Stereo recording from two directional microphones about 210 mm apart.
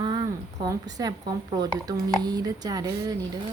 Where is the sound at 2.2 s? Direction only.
15° right (ahead or behind).